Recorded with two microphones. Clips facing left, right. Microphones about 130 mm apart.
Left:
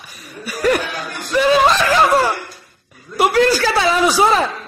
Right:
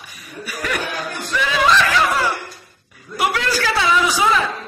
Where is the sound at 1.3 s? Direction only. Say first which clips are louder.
Left 4 dB; 40° left (ahead or behind).